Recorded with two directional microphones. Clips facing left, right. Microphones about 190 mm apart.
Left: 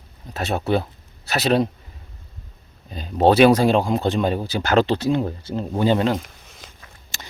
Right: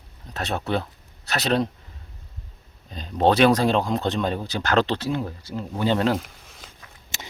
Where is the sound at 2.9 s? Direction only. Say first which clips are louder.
Left 4 dB; 5° left (ahead or behind); by 5.9 s 25° left (ahead or behind).